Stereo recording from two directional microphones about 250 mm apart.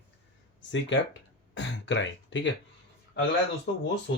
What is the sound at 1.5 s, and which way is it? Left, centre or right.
Speech, left.